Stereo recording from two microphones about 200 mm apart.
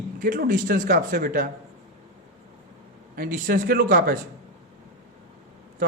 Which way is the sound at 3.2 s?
45° right (ahead or behind).